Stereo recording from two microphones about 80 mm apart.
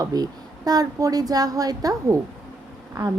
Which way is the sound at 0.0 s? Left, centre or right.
Right.